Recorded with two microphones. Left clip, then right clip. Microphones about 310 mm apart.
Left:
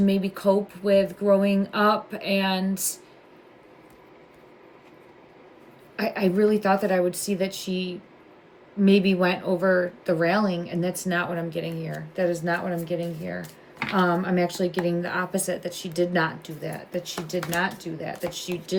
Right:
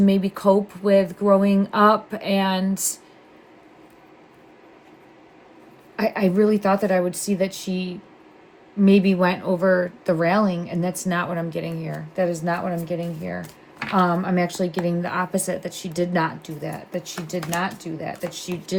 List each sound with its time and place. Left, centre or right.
0.0 s speech: centre
6.0 s speech: centre